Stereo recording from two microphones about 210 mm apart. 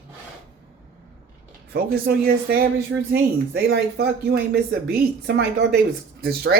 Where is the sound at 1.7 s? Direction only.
45° right (ahead or behind).